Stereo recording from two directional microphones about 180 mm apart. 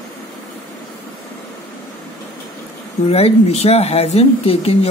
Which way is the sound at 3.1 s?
35° left (ahead or behind).